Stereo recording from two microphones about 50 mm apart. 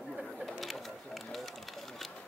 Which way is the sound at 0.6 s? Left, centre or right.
Centre.